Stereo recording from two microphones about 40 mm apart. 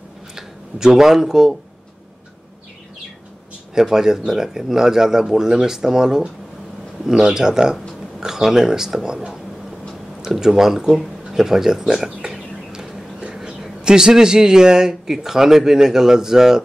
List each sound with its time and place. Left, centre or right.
0.4 s speech: centre
3.7 s a man's voice: centre
12.3 s a sound: centre
13.8 s a man's voice: centre